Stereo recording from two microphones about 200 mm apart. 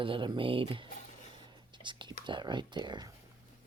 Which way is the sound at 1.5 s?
25° right (ahead or behind).